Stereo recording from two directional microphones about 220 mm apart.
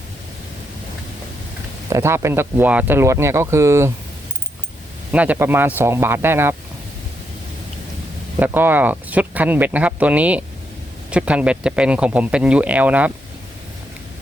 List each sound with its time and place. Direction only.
1.9 s speech: 10° right (ahead or behind)
5.1 s speech: 5° right (ahead or behind)
8.4 s speech: 10° right (ahead or behind)